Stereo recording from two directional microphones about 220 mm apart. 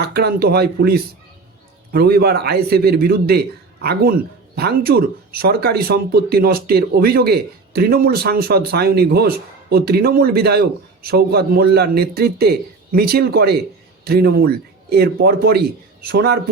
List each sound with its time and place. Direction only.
0.0 s a man's voice: 45° right (ahead or behind)